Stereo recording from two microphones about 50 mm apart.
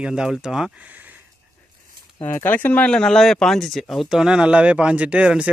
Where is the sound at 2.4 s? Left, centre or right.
Left.